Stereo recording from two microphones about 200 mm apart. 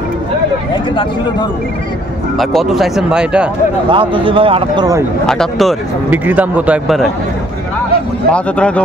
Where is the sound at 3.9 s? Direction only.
25° right (ahead or behind).